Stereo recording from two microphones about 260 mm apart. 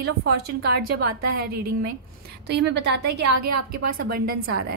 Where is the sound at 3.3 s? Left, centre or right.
Right.